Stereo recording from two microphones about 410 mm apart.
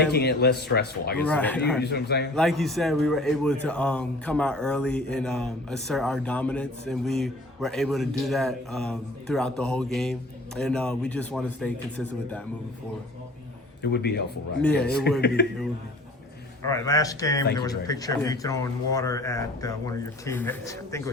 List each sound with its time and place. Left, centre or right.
0.1 s speech: left
1.2 s a man's voice: centre
1.8 s speech: left
2.3 s a man's voice: centre
13.8 s speech: left
16.6 s speech: centre